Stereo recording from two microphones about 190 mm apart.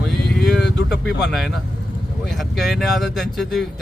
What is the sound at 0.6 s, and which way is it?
Speech, 65° left (ahead or behind).